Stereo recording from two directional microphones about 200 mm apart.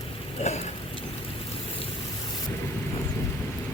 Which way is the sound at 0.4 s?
30° left (ahead or behind).